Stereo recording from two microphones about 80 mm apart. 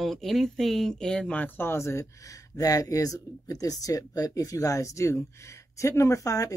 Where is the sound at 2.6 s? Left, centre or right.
Left.